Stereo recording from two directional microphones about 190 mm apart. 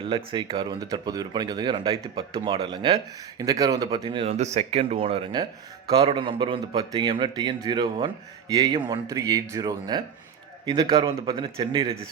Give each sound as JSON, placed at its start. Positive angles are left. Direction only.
{"t": 0.0, "sound": "speech", "side_deg": -30}